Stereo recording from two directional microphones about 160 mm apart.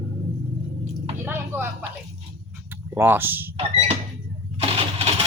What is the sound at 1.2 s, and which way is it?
Vehicle, 15° right (ahead or behind).